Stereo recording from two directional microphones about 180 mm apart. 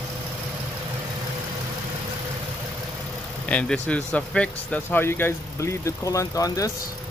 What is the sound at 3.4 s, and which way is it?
Speech, 5° left (ahead or behind).